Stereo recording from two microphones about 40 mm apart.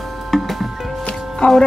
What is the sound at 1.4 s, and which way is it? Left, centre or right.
Speech, left.